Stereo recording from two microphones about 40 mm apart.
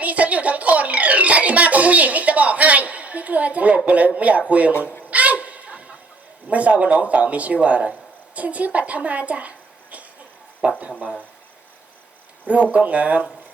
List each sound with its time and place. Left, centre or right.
0.0 s a child's voice: right
5.1 s a sound: right
6.5 s speech: right
9.0 s a sound: right
10.6 s speech: right
12.7 s speech: right